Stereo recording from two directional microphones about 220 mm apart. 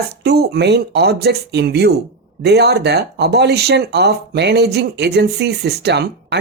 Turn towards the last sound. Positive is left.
turn(degrees=-50)  # may be behind; listen again after turning